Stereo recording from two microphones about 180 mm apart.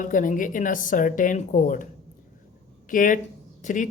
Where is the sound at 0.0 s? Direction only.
45° left (ahead or behind).